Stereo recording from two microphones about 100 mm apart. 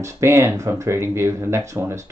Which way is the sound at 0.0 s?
30° right (ahead or behind).